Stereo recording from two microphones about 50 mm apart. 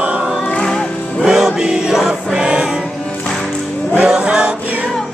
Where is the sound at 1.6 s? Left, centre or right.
Centre.